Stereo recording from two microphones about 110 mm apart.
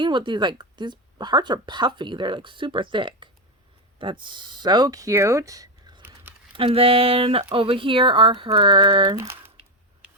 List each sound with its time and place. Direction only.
0.0 s speech: 45° right (ahead or behind)
6.0 s a sound: 20° right (ahead or behind)
6.5 s speech: 55° right (ahead or behind)